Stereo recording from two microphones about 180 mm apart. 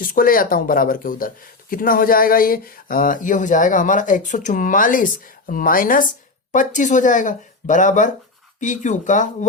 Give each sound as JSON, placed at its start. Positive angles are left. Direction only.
{"t": 0.0, "sound": "speech", "side_deg": 50}